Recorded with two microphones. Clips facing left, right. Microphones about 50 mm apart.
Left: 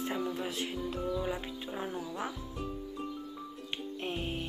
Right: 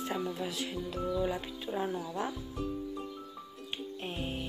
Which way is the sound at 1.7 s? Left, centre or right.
Centre.